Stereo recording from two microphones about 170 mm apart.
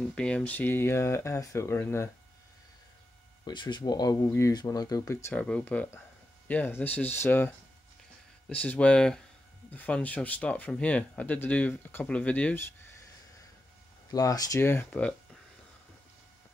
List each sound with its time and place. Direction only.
0.0 s speech: 5° left (ahead or behind)
3.4 s speech: 25° left (ahead or behind); by 12.6 s 10° left (ahead or behind)
14.1 s speech: 20° left (ahead or behind)